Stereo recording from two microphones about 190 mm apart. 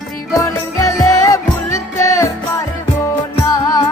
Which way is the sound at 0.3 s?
20° left (ahead or behind).